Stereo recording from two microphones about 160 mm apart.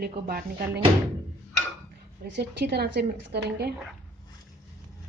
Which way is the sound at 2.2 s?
90° right.